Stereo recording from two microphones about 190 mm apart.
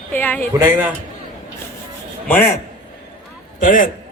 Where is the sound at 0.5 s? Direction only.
15° right (ahead or behind).